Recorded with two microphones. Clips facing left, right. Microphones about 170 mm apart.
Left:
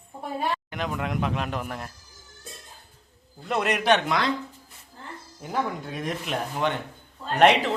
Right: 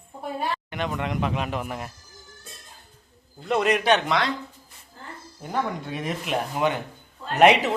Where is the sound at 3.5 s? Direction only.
Centre (ahead or behind).